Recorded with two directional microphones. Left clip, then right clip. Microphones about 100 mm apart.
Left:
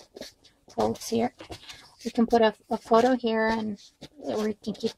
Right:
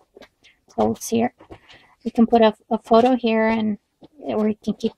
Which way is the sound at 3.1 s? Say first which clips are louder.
Right 6 dB; 35° right (ahead or behind).